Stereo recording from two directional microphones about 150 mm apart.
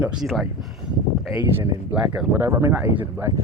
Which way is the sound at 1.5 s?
15° right (ahead or behind).